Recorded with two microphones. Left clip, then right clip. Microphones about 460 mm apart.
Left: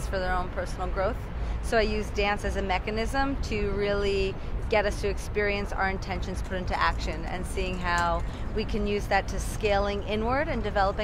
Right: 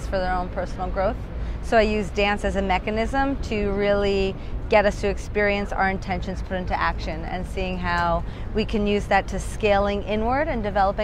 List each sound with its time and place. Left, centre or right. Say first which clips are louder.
0.1 s speech: right 5 dB; centre